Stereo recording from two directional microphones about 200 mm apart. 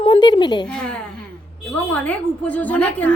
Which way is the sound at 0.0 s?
20° left (ahead or behind).